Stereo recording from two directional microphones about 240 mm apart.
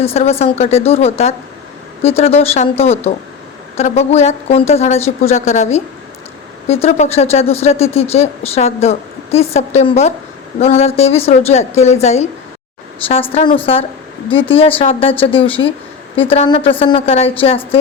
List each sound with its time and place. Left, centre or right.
0.0 s speech: left